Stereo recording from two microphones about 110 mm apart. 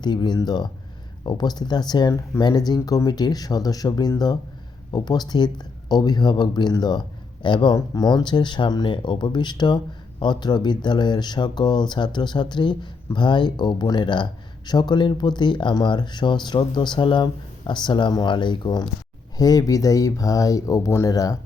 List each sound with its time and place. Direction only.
0.0 s speech: 40° left (ahead or behind)